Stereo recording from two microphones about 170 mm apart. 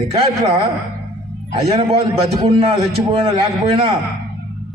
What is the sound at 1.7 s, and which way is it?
A man's voice, 35° right (ahead or behind).